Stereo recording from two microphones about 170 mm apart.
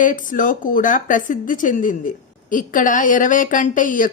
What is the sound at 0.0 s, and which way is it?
Speech, 50° left (ahead or behind).